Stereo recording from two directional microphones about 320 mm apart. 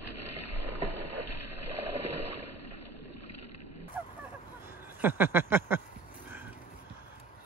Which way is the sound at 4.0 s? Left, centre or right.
Centre.